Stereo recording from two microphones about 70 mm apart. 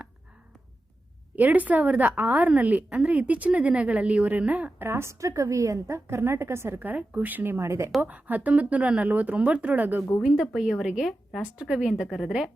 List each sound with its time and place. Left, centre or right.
1.4 s speech: right
4.9 s a woman's voice: right
7.6 s a woman's voice: right
8.0 s speech: right
10.2 s a woman's voice: centre